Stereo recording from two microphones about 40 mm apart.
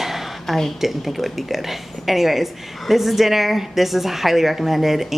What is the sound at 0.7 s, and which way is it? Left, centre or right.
A woman's voice, centre.